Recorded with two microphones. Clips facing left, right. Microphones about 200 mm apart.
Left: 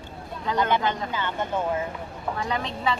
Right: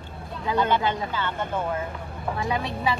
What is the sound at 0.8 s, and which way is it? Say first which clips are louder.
Speech: right 1 dB; 10° right (ahead or behind).